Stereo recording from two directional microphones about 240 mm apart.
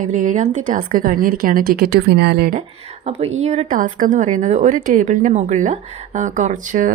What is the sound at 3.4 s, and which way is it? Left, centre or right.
A woman's voice, right.